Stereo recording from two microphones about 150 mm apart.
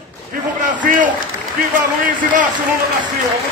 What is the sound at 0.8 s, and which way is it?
Speech, 60° right (ahead or behind).